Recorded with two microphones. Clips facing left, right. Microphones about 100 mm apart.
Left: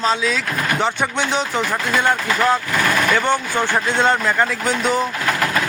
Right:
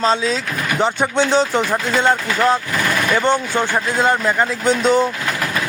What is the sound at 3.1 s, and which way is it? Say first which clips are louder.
Speech: right 2 dB; 20° right (ahead or behind).